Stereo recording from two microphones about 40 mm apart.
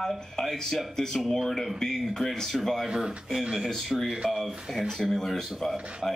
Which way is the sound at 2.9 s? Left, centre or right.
Centre.